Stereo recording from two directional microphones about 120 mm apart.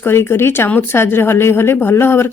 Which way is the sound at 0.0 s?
20° left (ahead or behind).